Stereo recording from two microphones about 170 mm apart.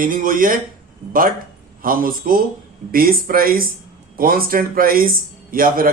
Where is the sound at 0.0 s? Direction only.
55° right (ahead or behind).